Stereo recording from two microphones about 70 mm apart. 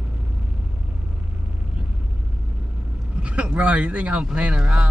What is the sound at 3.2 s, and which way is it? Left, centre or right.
Speech, centre.